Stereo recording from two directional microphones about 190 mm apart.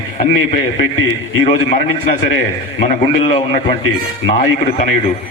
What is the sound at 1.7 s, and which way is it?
Speech, 45° left (ahead or behind).